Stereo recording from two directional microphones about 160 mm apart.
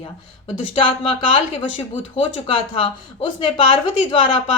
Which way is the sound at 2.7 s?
30° left (ahead or behind).